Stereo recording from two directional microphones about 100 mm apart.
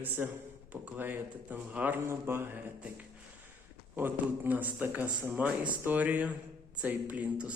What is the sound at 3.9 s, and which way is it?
Speech, 20° right (ahead or behind).